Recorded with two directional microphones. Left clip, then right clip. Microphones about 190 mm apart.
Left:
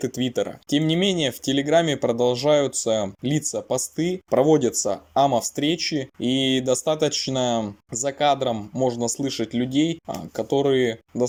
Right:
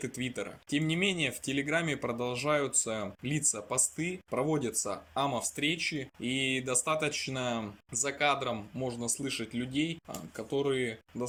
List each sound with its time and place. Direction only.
0.0 s speech: 30° left (ahead or behind)